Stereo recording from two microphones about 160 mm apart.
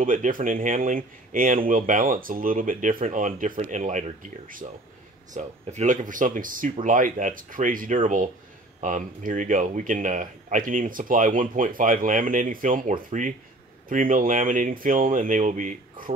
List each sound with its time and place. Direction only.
0.0 s speech: 55° right (ahead or behind)